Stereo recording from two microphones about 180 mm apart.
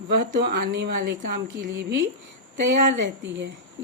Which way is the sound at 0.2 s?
60° right (ahead or behind).